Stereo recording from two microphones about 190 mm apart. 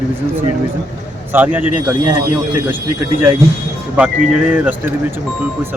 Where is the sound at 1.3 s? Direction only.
10° right (ahead or behind).